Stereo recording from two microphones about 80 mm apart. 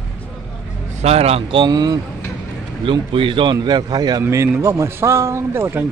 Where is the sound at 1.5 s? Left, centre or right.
Right.